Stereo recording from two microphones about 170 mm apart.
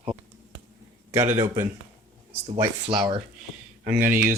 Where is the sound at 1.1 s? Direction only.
15° right (ahead or behind).